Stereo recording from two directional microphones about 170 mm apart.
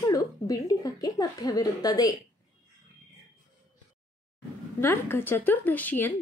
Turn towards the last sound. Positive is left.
turn(degrees=10)  # may be behind; listen again after turning